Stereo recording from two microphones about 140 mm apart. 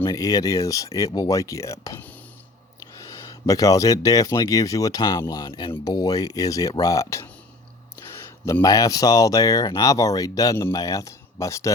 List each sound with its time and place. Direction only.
0.0 s speech: 25° left (ahead or behind)
7.9 s a sound: 20° left (ahead or behind)
8.6 s speech: 25° left (ahead or behind)